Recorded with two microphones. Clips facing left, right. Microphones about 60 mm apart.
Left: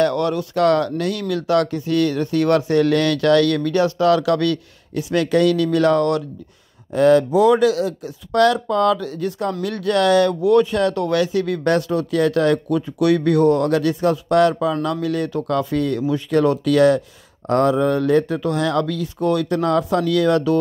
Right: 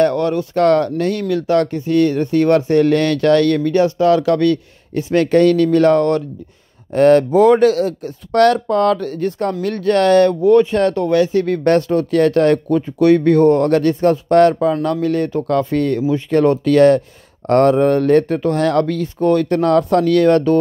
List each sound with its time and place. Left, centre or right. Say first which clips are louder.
0.0 s speech: right 3 dB; right
6.9 s speech: right 3 dB; right